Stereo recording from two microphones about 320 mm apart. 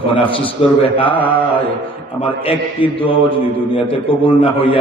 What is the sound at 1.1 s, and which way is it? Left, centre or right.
Carnatic music, centre.